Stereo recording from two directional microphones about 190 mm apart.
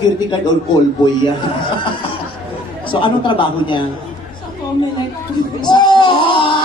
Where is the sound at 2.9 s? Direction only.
25° left (ahead or behind).